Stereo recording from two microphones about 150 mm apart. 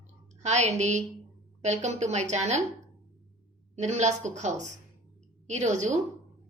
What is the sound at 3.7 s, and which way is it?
A woman's voice, 50° right (ahead or behind).